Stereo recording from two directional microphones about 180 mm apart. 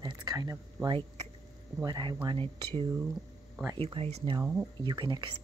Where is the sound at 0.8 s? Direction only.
30° right (ahead or behind).